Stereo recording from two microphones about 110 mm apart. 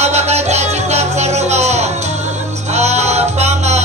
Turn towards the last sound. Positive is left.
turn(degrees=-90)